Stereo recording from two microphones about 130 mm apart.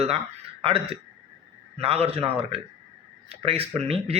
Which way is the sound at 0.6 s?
45° right (ahead or behind).